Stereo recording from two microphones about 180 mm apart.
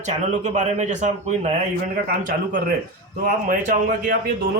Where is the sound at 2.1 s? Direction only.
55° right (ahead or behind).